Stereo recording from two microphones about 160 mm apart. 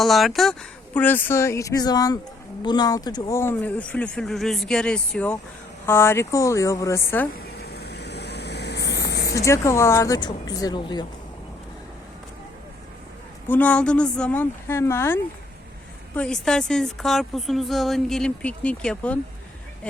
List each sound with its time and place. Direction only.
0.0 s a woman's voice: centre (ahead or behind)
0.9 s a woman's voice: 10° left (ahead or behind)
7.6 s vehicle: 90° left
9.2 s a woman's voice: 20° left (ahead or behind)
13.5 s speech: 10° left (ahead or behind)
16.1 s a woman's voice: 5° left (ahead or behind)